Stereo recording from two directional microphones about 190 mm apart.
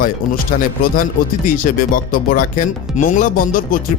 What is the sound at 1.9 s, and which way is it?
Speech, 45° left (ahead or behind).